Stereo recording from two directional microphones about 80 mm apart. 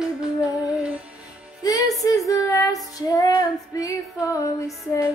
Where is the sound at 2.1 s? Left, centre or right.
Left.